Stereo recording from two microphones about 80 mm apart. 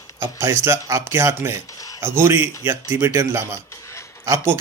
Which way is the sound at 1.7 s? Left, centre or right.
Left.